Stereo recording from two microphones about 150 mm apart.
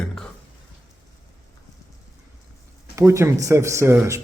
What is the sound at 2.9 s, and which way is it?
Speech, 20° right (ahead or behind).